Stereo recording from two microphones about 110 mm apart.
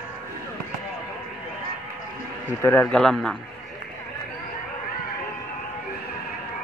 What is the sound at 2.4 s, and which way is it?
Speech, 20° left (ahead or behind).